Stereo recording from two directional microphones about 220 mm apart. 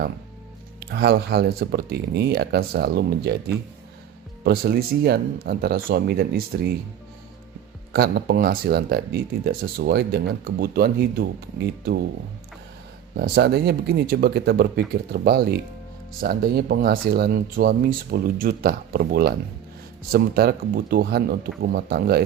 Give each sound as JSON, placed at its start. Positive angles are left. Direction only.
{"t": 0.8, "sound": "speech", "side_deg": -50}
{"t": 4.4, "sound": "speech", "side_deg": -45}
{"t": 7.9, "sound": "speech", "side_deg": -45}
{"t": 13.1, "sound": "speech", "side_deg": -45}